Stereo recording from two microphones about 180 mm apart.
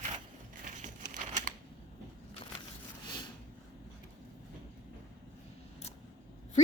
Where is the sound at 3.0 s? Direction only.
25° left (ahead or behind).